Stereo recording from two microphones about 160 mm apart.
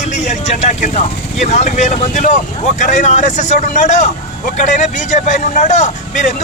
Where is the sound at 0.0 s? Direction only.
45° left (ahead or behind).